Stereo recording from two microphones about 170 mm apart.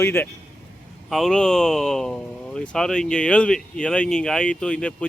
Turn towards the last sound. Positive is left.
turn(degrees=5)  # may be behind; listen again after turning